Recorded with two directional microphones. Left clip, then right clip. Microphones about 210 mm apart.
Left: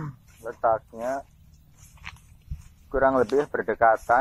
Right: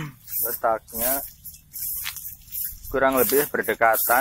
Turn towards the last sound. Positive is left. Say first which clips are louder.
# even
turn(degrees=-45)  # may be behind; listen again after turning